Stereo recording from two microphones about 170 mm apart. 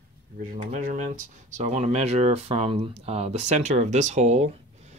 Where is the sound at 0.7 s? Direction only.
50° right (ahead or behind).